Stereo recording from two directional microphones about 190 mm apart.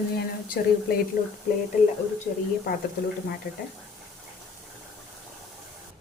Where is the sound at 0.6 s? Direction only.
50° left (ahead or behind).